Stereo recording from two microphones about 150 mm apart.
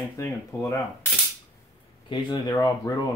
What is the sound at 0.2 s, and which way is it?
Speech, 20° left (ahead or behind).